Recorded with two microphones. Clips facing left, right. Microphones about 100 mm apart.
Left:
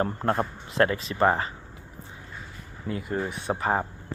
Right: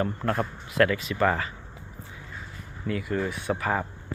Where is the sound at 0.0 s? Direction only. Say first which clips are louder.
Left 1 dB; 35° left (ahead or behind).